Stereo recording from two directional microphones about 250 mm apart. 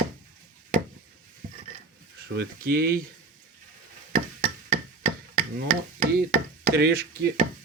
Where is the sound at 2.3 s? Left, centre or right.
Right.